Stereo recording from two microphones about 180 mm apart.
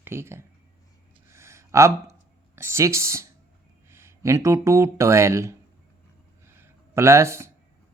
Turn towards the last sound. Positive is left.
turn(degrees=-15)  # may be behind; listen again after turning